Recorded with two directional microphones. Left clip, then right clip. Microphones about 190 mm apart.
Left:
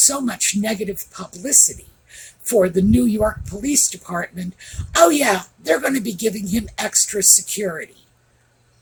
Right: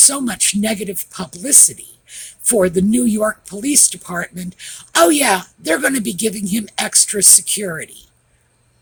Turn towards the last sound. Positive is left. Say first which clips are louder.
# right 1 dB
turn(degrees=-45)  # may be behind; listen again after turning